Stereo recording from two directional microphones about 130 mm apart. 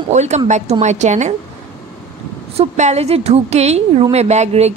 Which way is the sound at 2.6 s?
60° right (ahead or behind).